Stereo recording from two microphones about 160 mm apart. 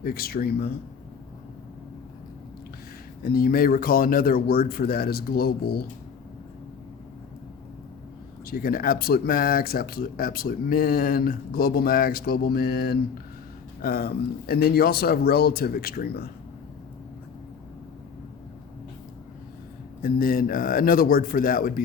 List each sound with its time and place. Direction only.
0.0 s speech: 70° left (ahead or behind)
3.2 s speech: 70° left (ahead or behind)
8.4 s speech: 70° left (ahead or behind)
20.0 s speech: 65° left (ahead or behind)